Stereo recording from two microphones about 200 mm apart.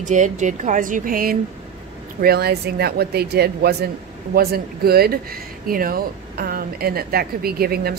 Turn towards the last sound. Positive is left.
turn(degrees=-50)  # may be behind; listen again after turning